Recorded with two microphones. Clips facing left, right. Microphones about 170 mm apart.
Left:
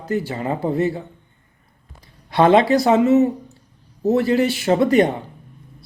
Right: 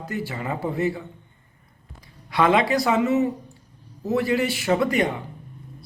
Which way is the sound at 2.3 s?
30° left (ahead or behind).